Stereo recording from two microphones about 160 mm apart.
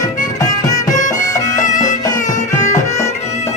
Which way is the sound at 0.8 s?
50° left (ahead or behind).